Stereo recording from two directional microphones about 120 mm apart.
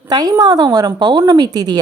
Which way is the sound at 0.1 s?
35° right (ahead or behind).